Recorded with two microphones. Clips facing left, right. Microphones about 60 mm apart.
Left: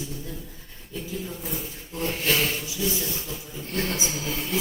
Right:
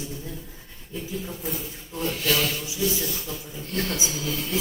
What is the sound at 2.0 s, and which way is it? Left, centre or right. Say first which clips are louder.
Rub: even; left.